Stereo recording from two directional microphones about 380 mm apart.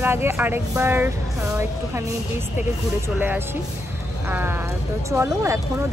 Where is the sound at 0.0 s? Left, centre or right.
Centre.